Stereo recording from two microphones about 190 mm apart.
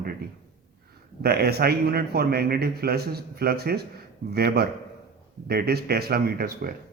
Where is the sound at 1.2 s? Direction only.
55° right (ahead or behind).